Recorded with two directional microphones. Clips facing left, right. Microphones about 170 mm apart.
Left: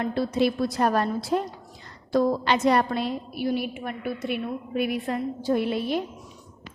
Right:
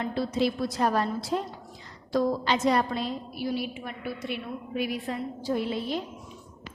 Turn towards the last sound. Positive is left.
turn(degrees=65)  # may be behind; listen again after turning